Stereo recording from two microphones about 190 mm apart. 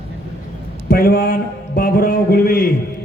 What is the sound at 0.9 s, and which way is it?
A man's voice, 50° left (ahead or behind).